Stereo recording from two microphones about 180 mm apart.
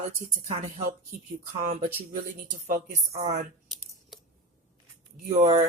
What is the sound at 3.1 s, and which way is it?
Speech, 35° right (ahead or behind).